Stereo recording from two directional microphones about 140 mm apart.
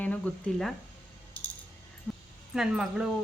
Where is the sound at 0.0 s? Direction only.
10° left (ahead or behind).